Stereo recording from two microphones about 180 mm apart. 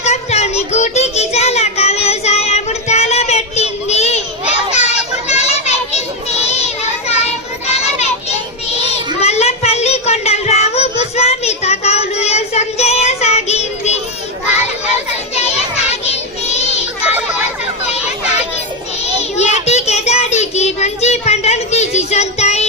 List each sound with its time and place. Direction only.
0.0 s child singing: 35° left (ahead or behind)
5.3 s children playing: 35° left (ahead or behind)
9.2 s child singing: 35° left (ahead or behind)
15.4 s children playing: 35° left (ahead or behind)
19.4 s child singing: 40° left (ahead or behind)